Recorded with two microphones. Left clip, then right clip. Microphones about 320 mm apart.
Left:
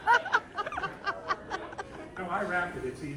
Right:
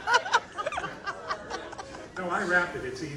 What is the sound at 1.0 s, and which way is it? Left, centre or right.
Snicker, left.